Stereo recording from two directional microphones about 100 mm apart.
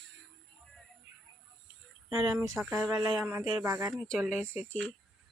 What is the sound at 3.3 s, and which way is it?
Speech, 25° right (ahead or behind).